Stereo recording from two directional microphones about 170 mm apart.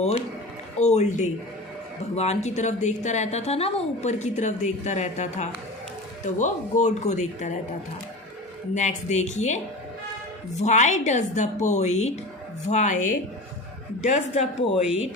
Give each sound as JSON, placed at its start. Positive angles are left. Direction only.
{"t": 0.8, "sound": "a woman's voice", "side_deg": 40}
{"t": 8.7, "sound": "a woman's voice", "side_deg": 45}
{"t": 10.6, "sound": "a woman's voice", "side_deg": 45}